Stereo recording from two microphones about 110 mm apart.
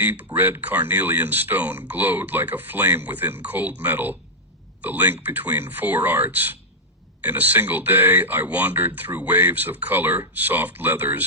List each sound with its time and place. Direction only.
0.0 s speech: 15° right (ahead or behind)